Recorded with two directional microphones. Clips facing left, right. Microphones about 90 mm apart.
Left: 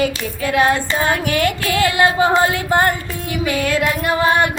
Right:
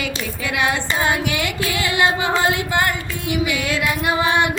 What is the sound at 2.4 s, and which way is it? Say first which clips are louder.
Carnatic music: left 3 dB; 40° left (ahead or behind).